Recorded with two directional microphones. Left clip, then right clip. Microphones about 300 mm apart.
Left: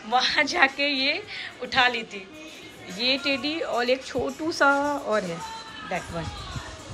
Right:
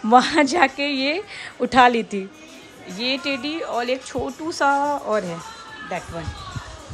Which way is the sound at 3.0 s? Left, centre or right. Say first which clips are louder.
Even; centre.